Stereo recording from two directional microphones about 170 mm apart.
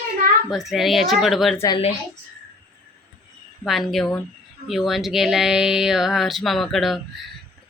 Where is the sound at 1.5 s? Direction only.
20° left (ahead or behind).